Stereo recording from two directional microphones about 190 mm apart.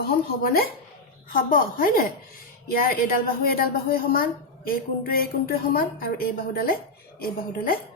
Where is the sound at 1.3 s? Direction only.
50° left (ahead or behind).